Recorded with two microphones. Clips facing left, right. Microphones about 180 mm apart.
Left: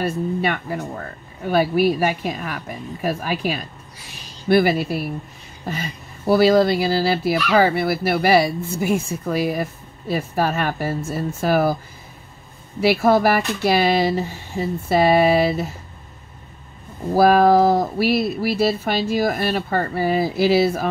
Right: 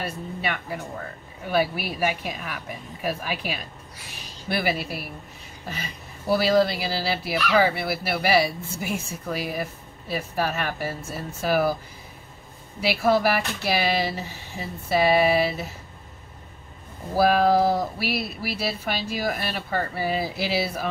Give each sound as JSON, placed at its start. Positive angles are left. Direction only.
{"t": 0.0, "sound": "speech", "side_deg": 45}
{"t": 12.8, "sound": "speech", "side_deg": 50}
{"t": 17.2, "sound": "speech", "side_deg": 45}